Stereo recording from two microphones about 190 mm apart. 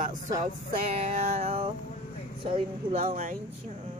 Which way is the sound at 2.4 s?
30° right (ahead or behind).